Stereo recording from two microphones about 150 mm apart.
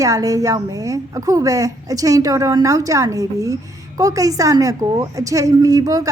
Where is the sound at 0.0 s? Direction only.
25° right (ahead or behind).